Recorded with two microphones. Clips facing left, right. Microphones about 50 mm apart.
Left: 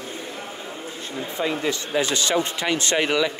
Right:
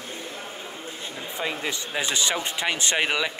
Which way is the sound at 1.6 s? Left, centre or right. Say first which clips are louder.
Left 5 dB; centre.